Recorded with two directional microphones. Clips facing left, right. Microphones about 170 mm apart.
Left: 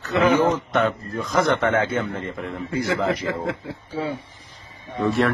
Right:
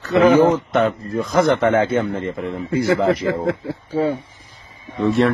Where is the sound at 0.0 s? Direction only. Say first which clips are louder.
Right 6 dB; 35° right (ahead or behind).